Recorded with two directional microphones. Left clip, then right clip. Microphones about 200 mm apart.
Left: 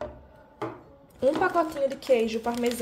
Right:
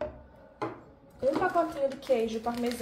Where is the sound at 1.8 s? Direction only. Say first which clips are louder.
Left 4 dB; 50° left (ahead or behind).